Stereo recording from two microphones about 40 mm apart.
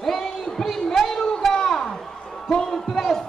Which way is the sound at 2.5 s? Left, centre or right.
Centre.